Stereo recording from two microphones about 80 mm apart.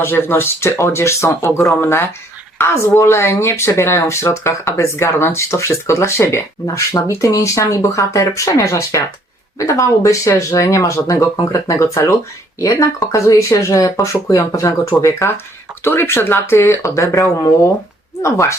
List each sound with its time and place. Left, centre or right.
0.0 s speech: left